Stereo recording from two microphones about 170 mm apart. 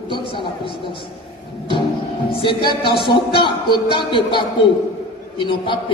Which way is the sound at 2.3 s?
30° left (ahead or behind).